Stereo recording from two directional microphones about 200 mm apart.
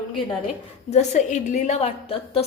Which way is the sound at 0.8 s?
35° left (ahead or behind).